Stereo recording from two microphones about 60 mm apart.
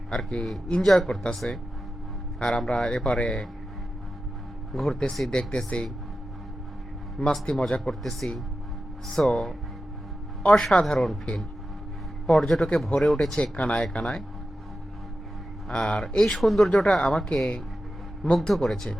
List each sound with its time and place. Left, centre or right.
0.1 s speech: centre
4.7 s a man's voice: centre
5.3 s speech: centre
7.2 s speech: centre
8.2 s speech: left
9.1 s speech: centre
12.2 s speech: centre
13.3 s speech: centre
15.7 s speech: centre
16.4 s speech: centre
17.0 s speech: centre